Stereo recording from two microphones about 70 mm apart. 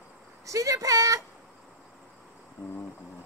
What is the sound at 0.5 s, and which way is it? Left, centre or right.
Speech, right.